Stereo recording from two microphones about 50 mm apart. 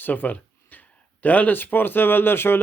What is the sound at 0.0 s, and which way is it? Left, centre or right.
Speech, left.